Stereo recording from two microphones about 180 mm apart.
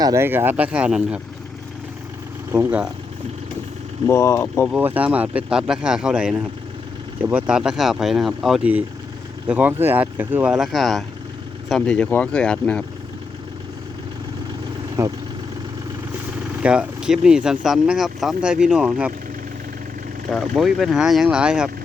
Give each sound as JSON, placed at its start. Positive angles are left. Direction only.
{"t": 0.0, "sound": "speech", "side_deg": -15}
{"t": 2.5, "sound": "speech", "side_deg": -10}
{"t": 4.0, "sound": "speech", "side_deg": 15}
{"t": 4.7, "sound": "speech", "side_deg": -10}
{"t": 15.0, "sound": "speech", "side_deg": -15}
{"t": 16.6, "sound": "speech", "side_deg": -5}
{"t": 20.3, "sound": "speech", "side_deg": 0}